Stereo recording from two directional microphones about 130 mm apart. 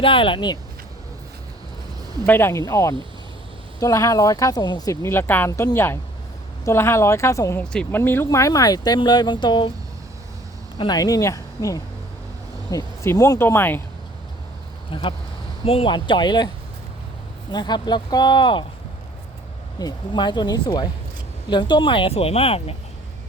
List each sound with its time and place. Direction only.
0.0 s speech: 40° left (ahead or behind)
2.2 s speech: 15° left (ahead or behind)
5.0 s speech: 15° left (ahead or behind)
7.6 s speech: 5° left (ahead or behind)
7.9 s speech: 15° left (ahead or behind); by 9.7 s 35° left (ahead or behind)
10.8 s speech: 30° left (ahead or behind)
14.8 s speech: 40° left (ahead or behind)
17.5 s speech: 35° left (ahead or behind)
19.8 s speech: 35° left (ahead or behind)